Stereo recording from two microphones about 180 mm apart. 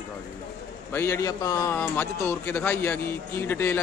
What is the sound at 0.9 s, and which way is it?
A man's voice, 15° left (ahead or behind).